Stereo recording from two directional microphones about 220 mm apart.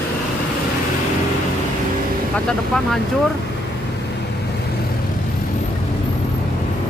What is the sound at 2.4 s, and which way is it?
Speech, centre (ahead or behind).